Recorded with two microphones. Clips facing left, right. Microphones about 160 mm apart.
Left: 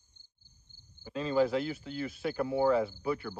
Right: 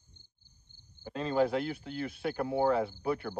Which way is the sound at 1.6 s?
55° right (ahead or behind).